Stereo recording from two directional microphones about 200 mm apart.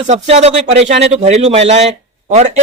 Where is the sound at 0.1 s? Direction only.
35° right (ahead or behind).